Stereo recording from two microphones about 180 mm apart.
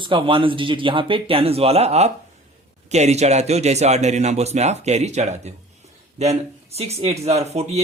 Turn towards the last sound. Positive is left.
turn(degrees=-35)  # may be behind; listen again after turning